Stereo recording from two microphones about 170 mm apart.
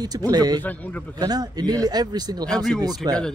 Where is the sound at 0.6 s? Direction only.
10° left (ahead or behind).